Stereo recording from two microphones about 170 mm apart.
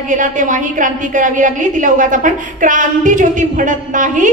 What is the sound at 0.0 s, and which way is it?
A woman's voice, 50° right (ahead or behind).